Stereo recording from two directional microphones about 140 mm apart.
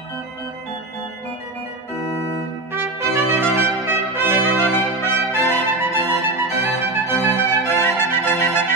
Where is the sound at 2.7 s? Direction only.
15° right (ahead or behind).